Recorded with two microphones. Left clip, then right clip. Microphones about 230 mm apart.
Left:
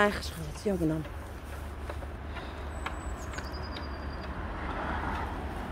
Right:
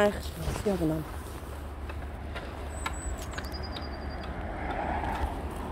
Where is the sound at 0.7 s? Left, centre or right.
Centre.